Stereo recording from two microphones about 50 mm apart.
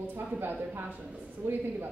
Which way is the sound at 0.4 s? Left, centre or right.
Right.